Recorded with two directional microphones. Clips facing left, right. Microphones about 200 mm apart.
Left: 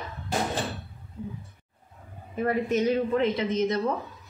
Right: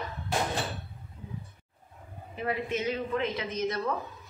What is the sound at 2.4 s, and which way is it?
Speech, 45° left (ahead or behind).